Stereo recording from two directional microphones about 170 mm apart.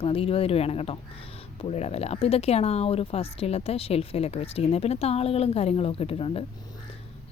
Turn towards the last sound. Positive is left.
turn(degrees=35)  # may be behind; listen again after turning